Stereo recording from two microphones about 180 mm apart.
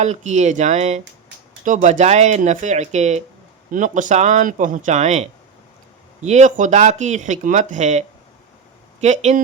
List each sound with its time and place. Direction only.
0.0 s speech: 40° right (ahead or behind)
6.2 s speech: 40° right (ahead or behind)